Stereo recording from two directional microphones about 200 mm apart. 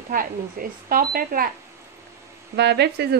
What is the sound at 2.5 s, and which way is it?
Speech, 55° right (ahead or behind).